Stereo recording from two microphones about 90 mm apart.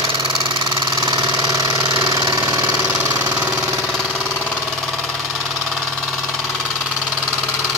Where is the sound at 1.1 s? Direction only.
45° right (ahead or behind).